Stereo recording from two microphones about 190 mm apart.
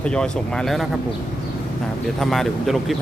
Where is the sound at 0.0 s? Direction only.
5° left (ahead or behind).